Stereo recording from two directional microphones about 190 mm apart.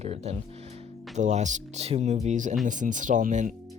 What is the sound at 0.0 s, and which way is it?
Speech, 35° right (ahead or behind).